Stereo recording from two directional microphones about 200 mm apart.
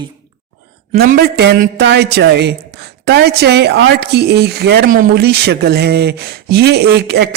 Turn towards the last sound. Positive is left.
turn(degrees=-55)  # may be behind; listen again after turning